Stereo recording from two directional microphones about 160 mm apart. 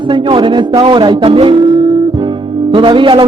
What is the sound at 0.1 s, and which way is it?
Speech, 30° right (ahead or behind).